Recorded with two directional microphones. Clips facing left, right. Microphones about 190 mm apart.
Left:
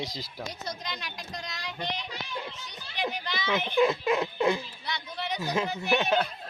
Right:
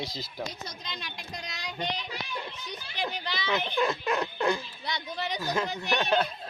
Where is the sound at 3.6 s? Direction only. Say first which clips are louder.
Left 4 dB; 15° left (ahead or behind).